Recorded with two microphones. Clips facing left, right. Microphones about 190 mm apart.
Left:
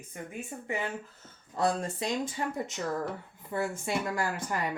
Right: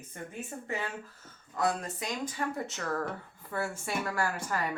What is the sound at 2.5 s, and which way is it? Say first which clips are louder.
Speech: left 1 dB; 15° left (ahead or behind).